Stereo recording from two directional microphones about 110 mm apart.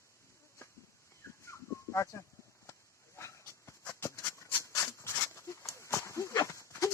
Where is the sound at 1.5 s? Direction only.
25° left (ahead or behind).